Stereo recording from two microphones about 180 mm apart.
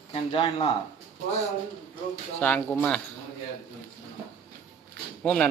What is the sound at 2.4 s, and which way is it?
Speech, 10° left (ahead or behind).